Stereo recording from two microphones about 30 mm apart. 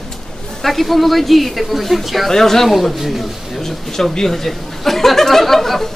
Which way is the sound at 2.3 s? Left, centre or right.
Centre.